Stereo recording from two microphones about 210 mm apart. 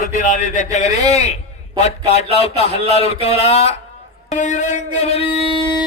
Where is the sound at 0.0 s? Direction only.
35° left (ahead or behind).